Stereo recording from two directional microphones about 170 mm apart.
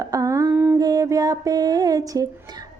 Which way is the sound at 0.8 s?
20° right (ahead or behind).